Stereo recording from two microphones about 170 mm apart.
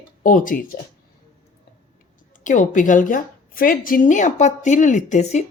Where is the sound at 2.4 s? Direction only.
50° left (ahead or behind).